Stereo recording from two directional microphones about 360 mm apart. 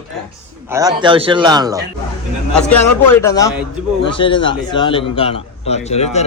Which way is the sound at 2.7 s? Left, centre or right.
Centre.